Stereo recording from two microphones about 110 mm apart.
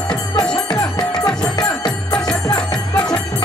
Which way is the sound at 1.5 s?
40° left (ahead or behind).